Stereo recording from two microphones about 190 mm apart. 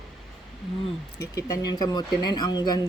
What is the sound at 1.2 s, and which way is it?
Speech, 20° left (ahead or behind).